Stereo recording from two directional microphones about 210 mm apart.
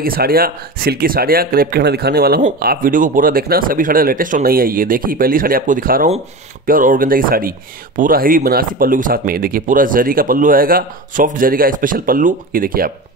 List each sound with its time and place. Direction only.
0.0 s speech: 45° right (ahead or behind)